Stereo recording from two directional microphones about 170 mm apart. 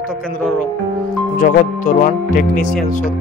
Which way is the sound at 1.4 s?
50° left (ahead or behind).